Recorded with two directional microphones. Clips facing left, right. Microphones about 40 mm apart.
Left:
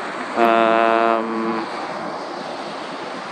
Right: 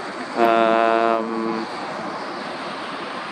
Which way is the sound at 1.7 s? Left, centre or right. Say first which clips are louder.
Left 2 dB; centre.